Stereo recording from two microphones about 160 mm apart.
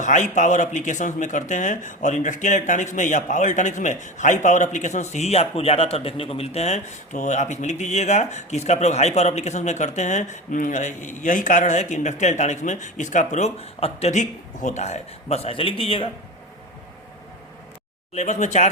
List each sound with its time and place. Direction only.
0.0 s speech: 50° left (ahead or behind)
18.1 s speech: 45° left (ahead or behind)